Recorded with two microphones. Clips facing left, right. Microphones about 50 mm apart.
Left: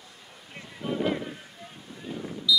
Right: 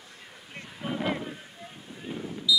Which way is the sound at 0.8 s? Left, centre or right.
Centre.